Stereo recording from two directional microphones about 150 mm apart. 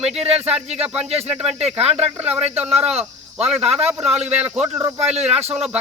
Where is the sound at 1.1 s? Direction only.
45° right (ahead or behind).